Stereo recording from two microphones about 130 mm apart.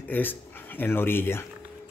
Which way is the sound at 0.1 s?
15° left (ahead or behind).